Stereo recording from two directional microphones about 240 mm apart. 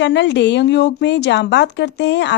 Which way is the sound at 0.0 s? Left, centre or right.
Left.